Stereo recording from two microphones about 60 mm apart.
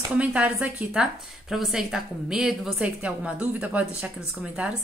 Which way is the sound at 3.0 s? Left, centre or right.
Right.